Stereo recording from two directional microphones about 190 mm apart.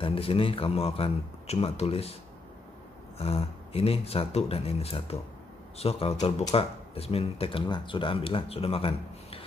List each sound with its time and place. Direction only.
0.0 s speech: 30° left (ahead or behind)
3.2 s speech: 30° left (ahead or behind)